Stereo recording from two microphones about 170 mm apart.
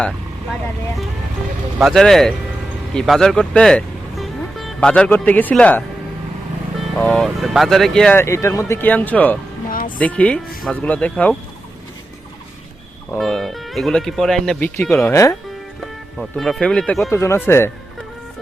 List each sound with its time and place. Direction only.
1.8 s speech: centre (ahead or behind)
7.0 s speech: 5° left (ahead or behind)
8.2 s speech: 15° left (ahead or behind)
9.6 s music: 55° left (ahead or behind)
10.0 s speech: 10° left (ahead or behind)
13.1 s speech: centre (ahead or behind)
15.0 s speech: 15° left (ahead or behind)
16.1 s speech: centre (ahead or behind)
17.1 s speech: 15° left (ahead or behind)